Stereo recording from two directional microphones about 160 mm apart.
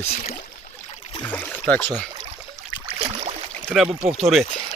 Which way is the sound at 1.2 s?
10° left (ahead or behind).